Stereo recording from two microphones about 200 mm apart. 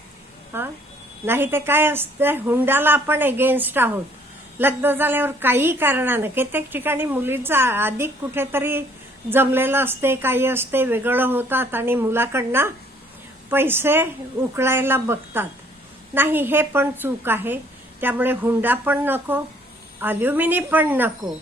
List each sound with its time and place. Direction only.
0.5 s a woman's voice: 10° right (ahead or behind)